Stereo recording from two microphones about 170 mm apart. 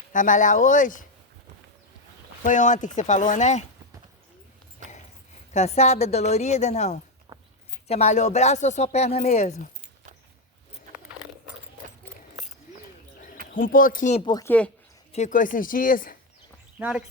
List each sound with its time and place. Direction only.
0.1 s speech: 50° left (ahead or behind)
2.4 s speech: 45° left (ahead or behind)
5.5 s speech: 40° left (ahead or behind)
7.3 s a sound: 25° right (ahead or behind)
7.9 s speech: 40° left (ahead or behind)
13.5 s speech: 55° left (ahead or behind)
14.3 s speech: 20° left (ahead or behind)
15.1 s speech: 45° left (ahead or behind)